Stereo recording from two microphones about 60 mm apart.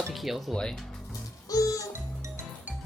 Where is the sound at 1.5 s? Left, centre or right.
Left.